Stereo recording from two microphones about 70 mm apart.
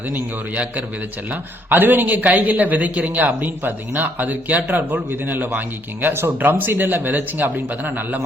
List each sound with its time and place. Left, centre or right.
0.1 s speech: right